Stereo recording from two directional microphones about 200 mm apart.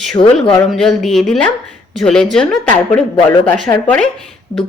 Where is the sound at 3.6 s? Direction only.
5° left (ahead or behind).